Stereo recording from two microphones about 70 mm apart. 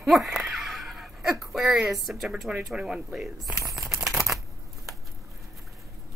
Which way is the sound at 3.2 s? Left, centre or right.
Centre.